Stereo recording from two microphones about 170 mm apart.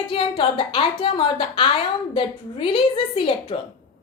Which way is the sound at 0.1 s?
30° left (ahead or behind).